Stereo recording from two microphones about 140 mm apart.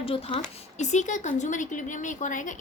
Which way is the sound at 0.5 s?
55° left (ahead or behind).